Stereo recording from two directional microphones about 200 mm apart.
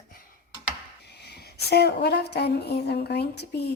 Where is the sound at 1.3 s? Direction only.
55° left (ahead or behind).